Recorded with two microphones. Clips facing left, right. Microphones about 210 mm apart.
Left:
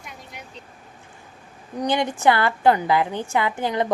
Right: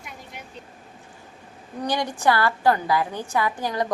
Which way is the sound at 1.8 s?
25° left (ahead or behind).